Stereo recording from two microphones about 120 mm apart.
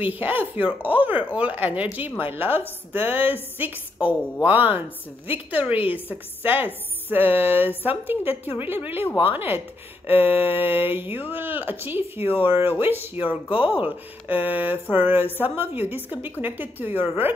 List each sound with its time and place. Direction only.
0.0 s speech: 15° right (ahead or behind)